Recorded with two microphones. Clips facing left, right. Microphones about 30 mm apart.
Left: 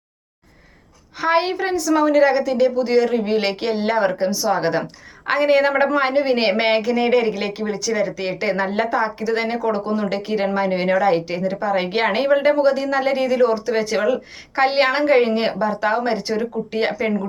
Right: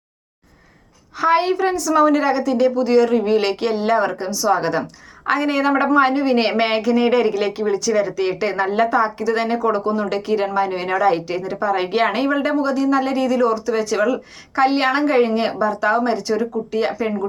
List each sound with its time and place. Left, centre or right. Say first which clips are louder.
1.2 s speech: right 2 dB; centre